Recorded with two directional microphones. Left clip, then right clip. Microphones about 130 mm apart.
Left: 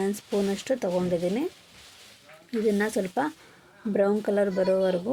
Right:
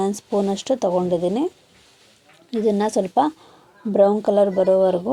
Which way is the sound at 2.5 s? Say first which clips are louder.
Right 5 dB; 20° right (ahead or behind).